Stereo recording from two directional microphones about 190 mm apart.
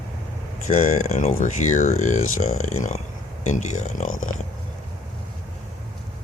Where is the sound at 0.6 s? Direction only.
40° left (ahead or behind).